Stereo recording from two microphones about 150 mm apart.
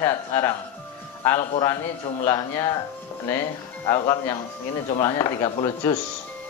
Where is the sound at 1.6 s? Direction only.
20° left (ahead or behind).